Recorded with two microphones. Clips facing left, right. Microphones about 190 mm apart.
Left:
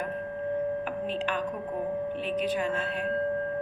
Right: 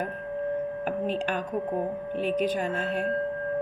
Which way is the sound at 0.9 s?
45° right (ahead or behind).